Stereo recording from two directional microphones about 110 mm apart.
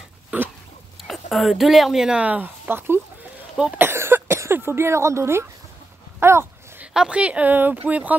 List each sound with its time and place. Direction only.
0.3 s dog: 15° right (ahead or behind)
1.0 s speech: centre (ahead or behind); by 3.0 s 20° right (ahead or behind)
3.7 s cough: 20° right (ahead or behind)
6.1 s a sound: 20° right (ahead or behind)
6.9 s speech: 10° right (ahead or behind)